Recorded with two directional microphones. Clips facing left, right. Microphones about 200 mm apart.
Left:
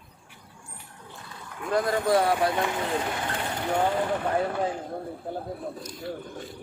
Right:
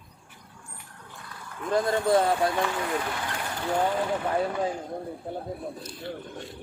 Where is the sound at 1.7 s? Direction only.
25° right (ahead or behind).